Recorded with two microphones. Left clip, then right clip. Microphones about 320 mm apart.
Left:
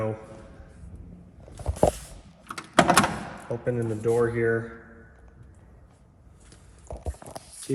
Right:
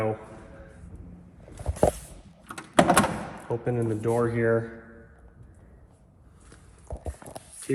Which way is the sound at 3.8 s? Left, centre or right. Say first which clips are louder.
Left 3 dB; centre.